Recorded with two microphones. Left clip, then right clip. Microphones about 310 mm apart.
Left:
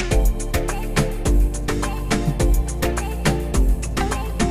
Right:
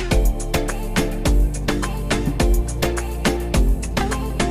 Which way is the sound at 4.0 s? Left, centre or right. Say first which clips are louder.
Even; centre.